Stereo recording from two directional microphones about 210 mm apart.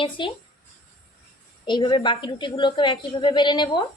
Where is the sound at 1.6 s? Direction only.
20° left (ahead or behind).